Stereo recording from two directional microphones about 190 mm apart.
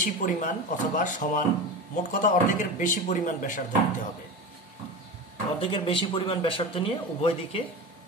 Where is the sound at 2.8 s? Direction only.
40° left (ahead or behind).